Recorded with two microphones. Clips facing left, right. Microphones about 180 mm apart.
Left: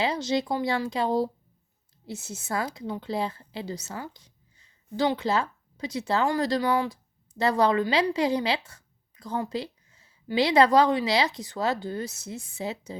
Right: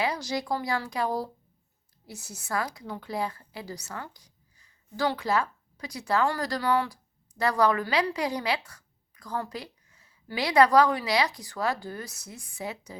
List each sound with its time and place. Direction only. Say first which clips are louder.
0.0 s a woman's voice: left 3 dB; 25° left (ahead or behind)